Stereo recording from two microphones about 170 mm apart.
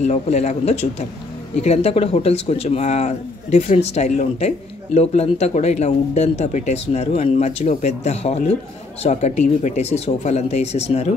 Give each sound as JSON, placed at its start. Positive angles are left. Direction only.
{"t": 0.0, "sound": "speech", "side_deg": 40}